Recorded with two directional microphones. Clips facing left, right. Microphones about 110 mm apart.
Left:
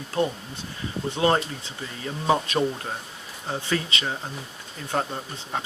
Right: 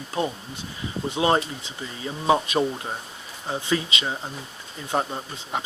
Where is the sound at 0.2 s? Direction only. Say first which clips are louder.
Left 2 dB; 15° right (ahead or behind).